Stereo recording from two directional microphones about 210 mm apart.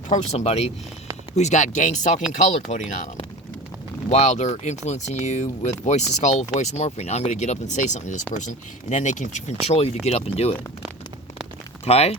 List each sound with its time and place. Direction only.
0.1 s speech: 30° left (ahead or behind)
4.1 s speech: 30° left (ahead or behind)
11.9 s speech: 30° left (ahead or behind)